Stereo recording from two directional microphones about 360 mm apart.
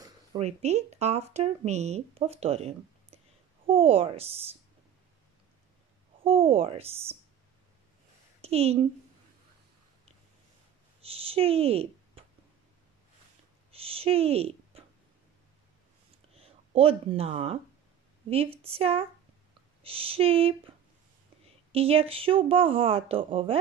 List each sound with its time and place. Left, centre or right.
0.0 s speech: centre
6.2 s speech: centre
8.4 s a woman's voice: centre
11.0 s a sound: centre
13.7 s a sound: centre
16.3 s speech: centre